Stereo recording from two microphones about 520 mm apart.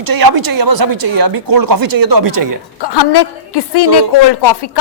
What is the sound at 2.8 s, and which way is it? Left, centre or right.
A woman's voice, left.